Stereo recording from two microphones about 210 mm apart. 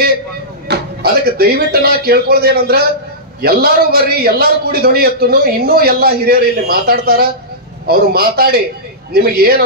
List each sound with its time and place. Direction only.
0.7 s a man's voice: 45° right (ahead or behind)